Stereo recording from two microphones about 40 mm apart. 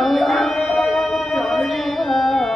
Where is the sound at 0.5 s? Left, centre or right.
Left.